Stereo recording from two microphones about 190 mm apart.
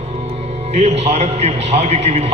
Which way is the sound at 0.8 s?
35° right (ahead or behind).